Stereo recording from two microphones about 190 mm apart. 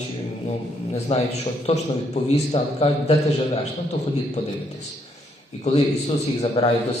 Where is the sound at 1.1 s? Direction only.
35° left (ahead or behind).